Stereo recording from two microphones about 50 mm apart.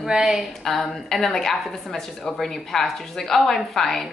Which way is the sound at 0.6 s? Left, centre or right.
Centre.